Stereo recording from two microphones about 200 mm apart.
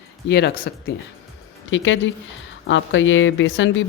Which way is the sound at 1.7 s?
70° left (ahead or behind).